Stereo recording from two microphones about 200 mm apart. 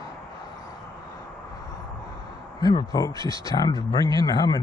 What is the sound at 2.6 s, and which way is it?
Speech, 20° left (ahead or behind).